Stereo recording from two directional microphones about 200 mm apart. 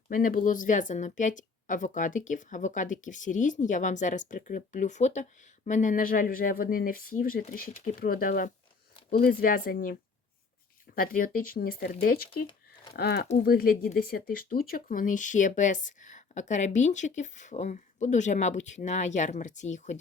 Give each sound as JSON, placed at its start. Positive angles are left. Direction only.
{"t": 0.1, "sound": "a woman's voice", "side_deg": 40}